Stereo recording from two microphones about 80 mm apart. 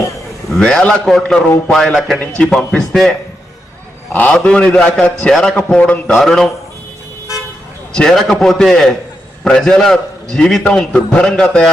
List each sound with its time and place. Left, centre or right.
0.5 s a man's voice: centre
2.1 s a man's voice: centre
4.1 s a man's voice: centre
7.9 s a man's voice: centre